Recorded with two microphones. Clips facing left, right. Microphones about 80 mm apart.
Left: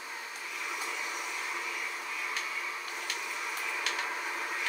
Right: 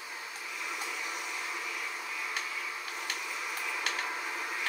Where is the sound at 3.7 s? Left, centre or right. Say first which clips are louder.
Even; centre.